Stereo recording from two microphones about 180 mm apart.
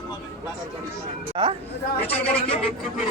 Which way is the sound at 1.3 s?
30° right (ahead or behind).